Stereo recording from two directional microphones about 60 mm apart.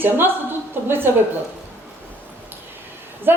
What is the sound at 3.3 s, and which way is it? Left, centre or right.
Speech, right.